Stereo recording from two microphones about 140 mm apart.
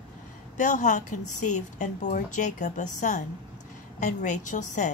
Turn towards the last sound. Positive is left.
turn(degrees=60)  # may be behind; listen again after turning